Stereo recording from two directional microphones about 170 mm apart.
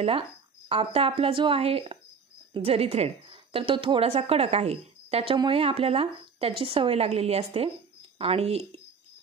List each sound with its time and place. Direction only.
0.7 s a woman's voice: 35° right (ahead or behind)